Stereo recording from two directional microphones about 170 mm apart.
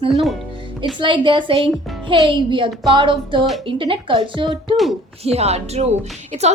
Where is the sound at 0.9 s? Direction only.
30° right (ahead or behind).